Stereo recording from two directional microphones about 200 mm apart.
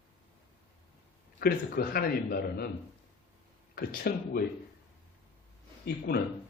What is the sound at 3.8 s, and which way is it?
Speech, 50° left (ahead or behind).